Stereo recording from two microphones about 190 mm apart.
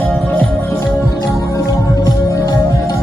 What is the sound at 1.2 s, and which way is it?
Music, 20° left (ahead or behind).